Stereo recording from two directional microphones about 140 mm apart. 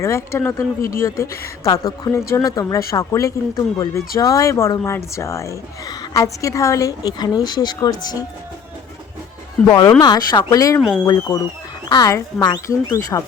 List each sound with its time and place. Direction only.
0.0 s speech: 20° left (ahead or behind)
0.8 s speech: 90° left
1.0 s speech: 20° left (ahead or behind)
9.6 s speech: 25° left (ahead or behind)
10.8 s speech: centre (ahead or behind)
11.0 s speech: 25° left (ahead or behind)